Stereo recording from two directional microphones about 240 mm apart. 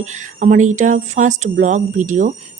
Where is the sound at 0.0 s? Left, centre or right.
Right.